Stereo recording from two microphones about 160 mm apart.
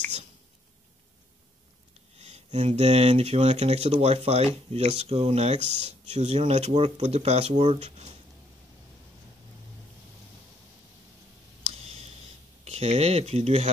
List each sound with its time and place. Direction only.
2.1 s speech: 40° right (ahead or behind)
5.6 s speech: 35° left (ahead or behind)
5.9 s speech: 40° right (ahead or behind)
12.6 s speech: 40° right (ahead or behind)